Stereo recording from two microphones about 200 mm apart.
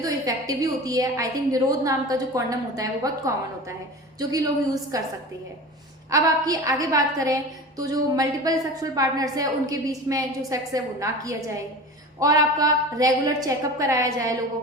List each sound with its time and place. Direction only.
0.0 s a woman's voice: 15° right (ahead or behind)
6.1 s a woman's voice: 15° right (ahead or behind)